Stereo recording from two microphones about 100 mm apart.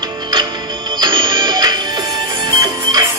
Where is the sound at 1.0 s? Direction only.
50° right (ahead or behind).